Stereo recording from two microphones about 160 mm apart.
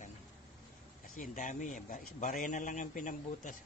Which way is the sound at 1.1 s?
55° left (ahead or behind).